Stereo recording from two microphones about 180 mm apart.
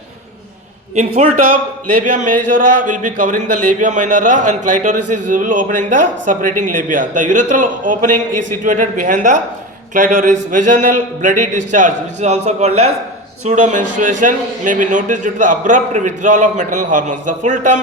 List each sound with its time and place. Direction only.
0.9 s a man's voice: 40° right (ahead or behind)